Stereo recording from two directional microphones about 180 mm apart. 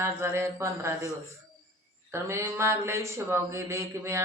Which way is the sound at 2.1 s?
15° right (ahead or behind).